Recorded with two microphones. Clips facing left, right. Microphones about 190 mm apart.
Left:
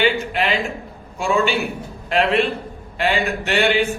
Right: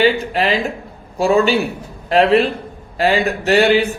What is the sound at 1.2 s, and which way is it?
A man's voice, 35° right (ahead or behind).